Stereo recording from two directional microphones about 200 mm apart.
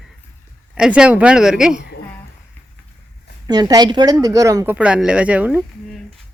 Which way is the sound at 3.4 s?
20° right (ahead or behind).